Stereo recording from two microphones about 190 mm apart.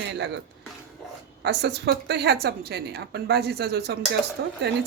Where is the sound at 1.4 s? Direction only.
60° right (ahead or behind).